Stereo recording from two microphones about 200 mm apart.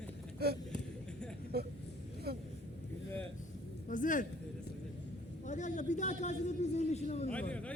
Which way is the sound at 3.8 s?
40° left (ahead or behind).